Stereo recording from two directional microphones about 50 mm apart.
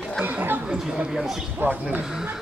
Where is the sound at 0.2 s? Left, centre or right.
Right.